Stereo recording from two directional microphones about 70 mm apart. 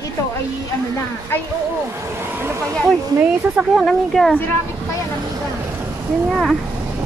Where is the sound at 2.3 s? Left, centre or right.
Right.